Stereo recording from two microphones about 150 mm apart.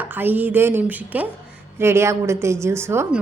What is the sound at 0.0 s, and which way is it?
A woman's voice, 10° right (ahead or behind).